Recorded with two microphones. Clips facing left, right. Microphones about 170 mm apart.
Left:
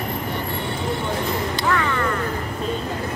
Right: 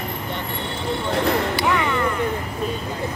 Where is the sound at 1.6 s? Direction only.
15° right (ahead or behind).